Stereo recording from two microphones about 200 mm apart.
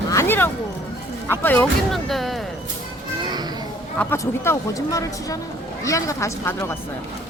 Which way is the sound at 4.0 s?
10° left (ahead or behind).